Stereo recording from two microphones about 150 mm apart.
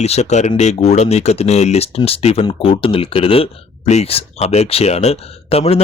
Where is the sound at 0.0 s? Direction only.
45° left (ahead or behind).